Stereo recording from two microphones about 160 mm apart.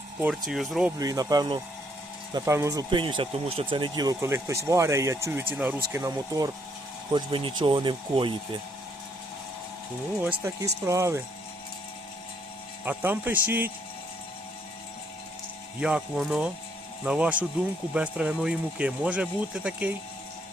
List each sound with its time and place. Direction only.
0.4 s speech: centre (ahead or behind)
0.9 s speech: 20° right (ahead or behind)
7.1 s speech: 30° right (ahead or behind)
10.2 s speech: 15° right (ahead or behind)
12.8 s speech: 10° right (ahead or behind)
15.8 s speech: 5° right (ahead or behind)